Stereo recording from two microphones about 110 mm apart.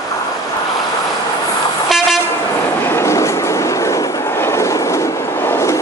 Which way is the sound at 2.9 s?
25° left (ahead or behind).